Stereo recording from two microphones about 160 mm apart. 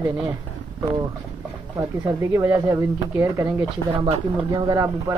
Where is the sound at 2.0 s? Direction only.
20° right (ahead or behind).